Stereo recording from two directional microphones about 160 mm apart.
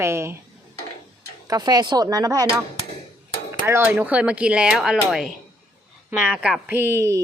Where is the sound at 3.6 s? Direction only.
15° right (ahead or behind).